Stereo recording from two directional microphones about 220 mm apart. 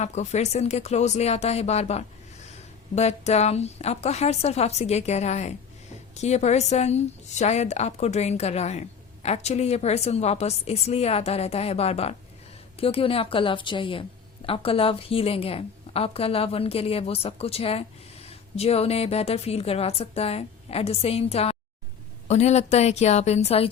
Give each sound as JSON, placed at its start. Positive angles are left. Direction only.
{"t": 0.0, "sound": "a woman's voice", "side_deg": 30}